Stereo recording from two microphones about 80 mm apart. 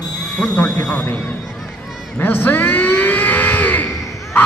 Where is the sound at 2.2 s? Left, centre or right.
Left.